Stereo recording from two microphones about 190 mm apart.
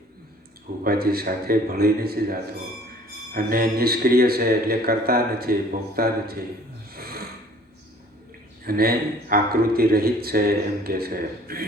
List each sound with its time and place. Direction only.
0.9 s a man's voice: 50° right (ahead or behind)
3.3 s a man's voice: 50° right (ahead or behind)
6.9 s snort: 55° right (ahead or behind)
8.6 s a man's voice: 50° right (ahead or behind)